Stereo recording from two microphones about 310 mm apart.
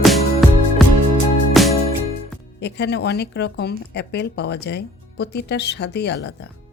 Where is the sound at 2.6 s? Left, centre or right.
Left.